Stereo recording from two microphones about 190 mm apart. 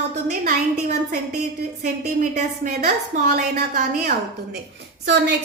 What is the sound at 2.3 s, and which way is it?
A woman's voice, 40° right (ahead or behind).